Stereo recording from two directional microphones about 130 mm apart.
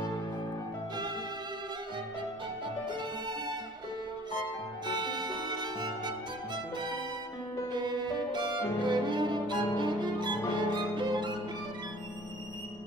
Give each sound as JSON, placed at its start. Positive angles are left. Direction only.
{"t": 2.9, "sound": "music", "side_deg": -35}
{"t": 4.8, "sound": "music", "side_deg": -35}
{"t": 7.7, "sound": "music", "side_deg": -35}
{"t": 10.5, "sound": "violin", "side_deg": -35}